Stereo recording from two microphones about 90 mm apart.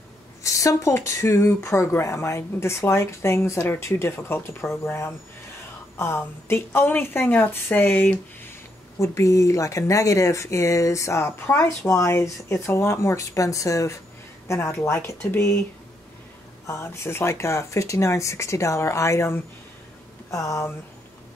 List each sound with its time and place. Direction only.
0.4 s a woman's voice: 35° left (ahead or behind); by 8.2 s 20° left (ahead or behind)
9.0 s a woman's voice: 35° left (ahead or behind)
16.6 s speech: 30° left (ahead or behind)